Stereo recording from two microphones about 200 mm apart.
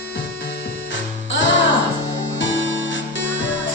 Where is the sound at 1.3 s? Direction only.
65° left (ahead or behind).